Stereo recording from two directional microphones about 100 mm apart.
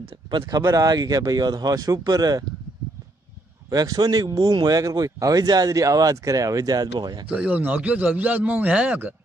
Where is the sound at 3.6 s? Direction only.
40° right (ahead or behind).